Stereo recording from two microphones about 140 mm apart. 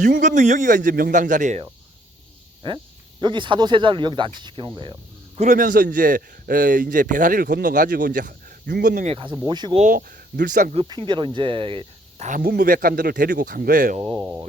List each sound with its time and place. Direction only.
0.0 s speech: 70° right (ahead or behind)
2.6 s speech: 35° right (ahead or behind)
5.4 s a man's voice: 70° right (ahead or behind)
9.0 s speech: 35° right (ahead or behind)
9.9 s speech: 85° right
10.8 s speech: 35° right (ahead or behind)
12.2 s speech: 80° right
14.0 s speech: 30° right (ahead or behind)